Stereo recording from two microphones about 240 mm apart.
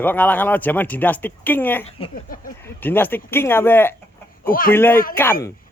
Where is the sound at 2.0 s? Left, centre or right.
Left.